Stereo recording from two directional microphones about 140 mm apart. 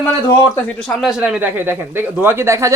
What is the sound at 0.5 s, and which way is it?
A man's voice, 5° left (ahead or behind).